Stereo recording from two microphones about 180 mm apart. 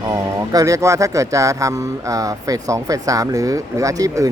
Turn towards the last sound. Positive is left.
turn(degrees=-20)  # may be behind; listen again after turning